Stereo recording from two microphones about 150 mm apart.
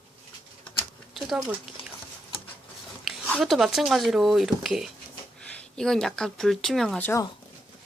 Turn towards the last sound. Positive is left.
turn(degrees=15)  # may be behind; listen again after turning